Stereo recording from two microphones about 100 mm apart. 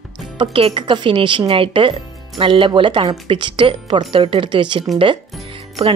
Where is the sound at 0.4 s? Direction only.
65° right (ahead or behind).